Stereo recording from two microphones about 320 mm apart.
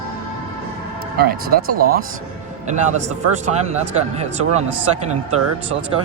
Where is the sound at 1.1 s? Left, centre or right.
Right.